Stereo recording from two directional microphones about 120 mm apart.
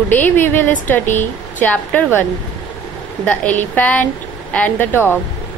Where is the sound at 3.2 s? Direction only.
15° left (ahead or behind).